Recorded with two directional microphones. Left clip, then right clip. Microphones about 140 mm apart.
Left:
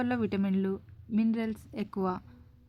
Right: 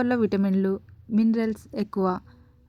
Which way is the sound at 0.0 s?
25° right (ahead or behind).